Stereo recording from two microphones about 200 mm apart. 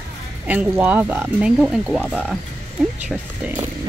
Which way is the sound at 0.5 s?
5° right (ahead or behind).